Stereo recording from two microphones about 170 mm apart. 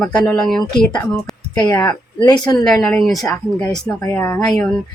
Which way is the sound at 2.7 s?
5° left (ahead or behind).